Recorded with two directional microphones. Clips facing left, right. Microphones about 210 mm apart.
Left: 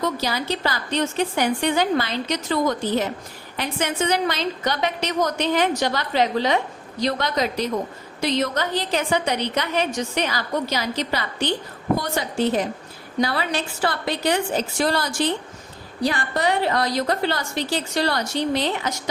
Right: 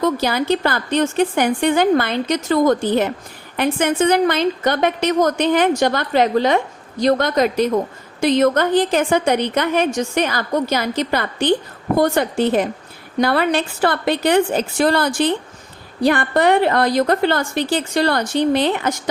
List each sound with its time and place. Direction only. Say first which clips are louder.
0.0 s a woman's voice: right 6 dB; 55° right (ahead or behind)